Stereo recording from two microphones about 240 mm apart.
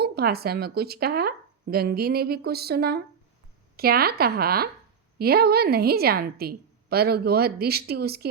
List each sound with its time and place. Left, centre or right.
0.0 s a woman's voice: right